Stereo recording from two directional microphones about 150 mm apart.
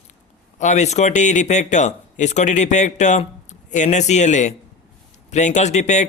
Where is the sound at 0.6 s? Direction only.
50° left (ahead or behind).